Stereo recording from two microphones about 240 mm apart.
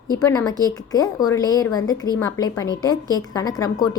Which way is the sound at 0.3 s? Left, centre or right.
Centre.